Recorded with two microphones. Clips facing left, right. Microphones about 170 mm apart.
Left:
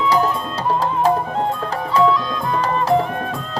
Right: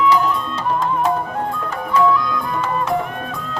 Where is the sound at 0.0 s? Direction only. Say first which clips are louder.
Right 1 dB; 40° left (ahead or behind).